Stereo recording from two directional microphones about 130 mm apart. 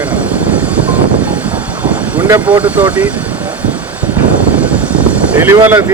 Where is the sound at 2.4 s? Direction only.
10° right (ahead or behind).